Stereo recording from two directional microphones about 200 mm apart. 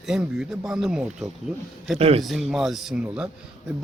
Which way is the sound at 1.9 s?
30° right (ahead or behind).